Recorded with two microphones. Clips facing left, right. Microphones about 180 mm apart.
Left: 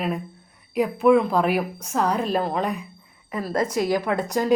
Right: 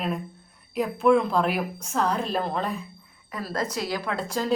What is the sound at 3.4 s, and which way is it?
Speech, 50° left (ahead or behind).